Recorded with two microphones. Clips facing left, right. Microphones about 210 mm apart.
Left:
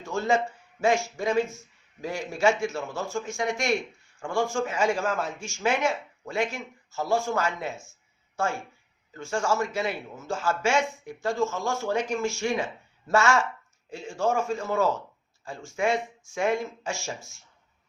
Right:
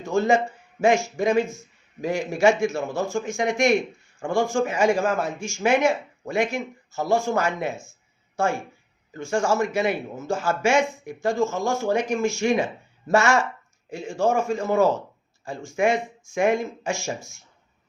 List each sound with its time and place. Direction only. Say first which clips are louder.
0.1 s speech: right 5 dB; 15° right (ahead or behind)
10.1 s speech: right 6 dB; 45° right (ahead or behind)
10.3 s speech: right 4 dB; 10° right (ahead or behind)